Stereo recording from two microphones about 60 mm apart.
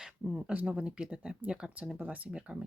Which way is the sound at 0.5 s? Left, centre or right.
Right.